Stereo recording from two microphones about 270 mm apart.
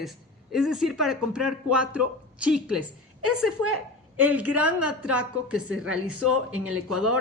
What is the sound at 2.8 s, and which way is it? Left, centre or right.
Speech, right.